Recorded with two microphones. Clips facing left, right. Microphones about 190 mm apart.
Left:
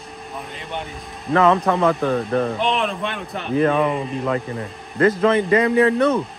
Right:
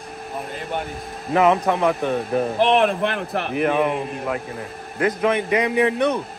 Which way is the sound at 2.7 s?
60° right (ahead or behind).